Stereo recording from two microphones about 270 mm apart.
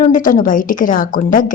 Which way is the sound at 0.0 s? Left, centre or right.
Left.